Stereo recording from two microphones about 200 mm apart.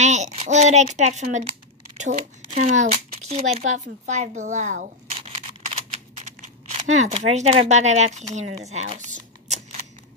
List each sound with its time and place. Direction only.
0.0 s speech: 35° right (ahead or behind)
6.4 s speech: 35° right (ahead or behind)